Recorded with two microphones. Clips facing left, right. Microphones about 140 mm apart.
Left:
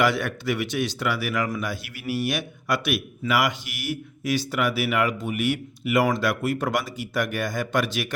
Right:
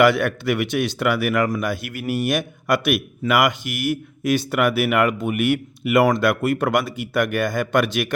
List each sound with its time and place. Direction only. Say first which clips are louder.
0.0 s a man's voice: right 6 dB; 60° right (ahead or behind)